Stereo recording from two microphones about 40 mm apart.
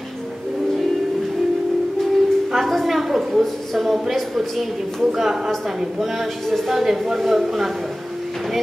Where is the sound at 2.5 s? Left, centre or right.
Centre.